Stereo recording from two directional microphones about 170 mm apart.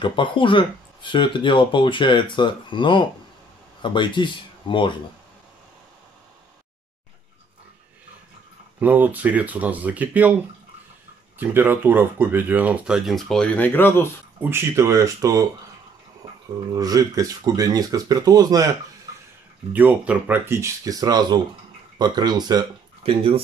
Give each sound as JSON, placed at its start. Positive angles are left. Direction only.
{"t": 0.0, "sound": "speech", "side_deg": 30}
{"t": 8.7, "sound": "speech", "side_deg": -10}
{"t": 11.3, "sound": "speech", "side_deg": -10}
{"t": 14.4, "sound": "speech", "side_deg": -15}
{"t": 16.7, "sound": "speech", "side_deg": -20}
{"t": 19.7, "sound": "speech", "side_deg": -10}